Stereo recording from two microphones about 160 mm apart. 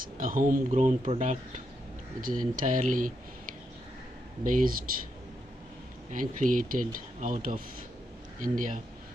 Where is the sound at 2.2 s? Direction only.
60° right (ahead or behind).